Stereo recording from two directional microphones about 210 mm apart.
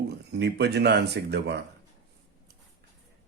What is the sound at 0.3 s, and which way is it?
Speech, 55° right (ahead or behind).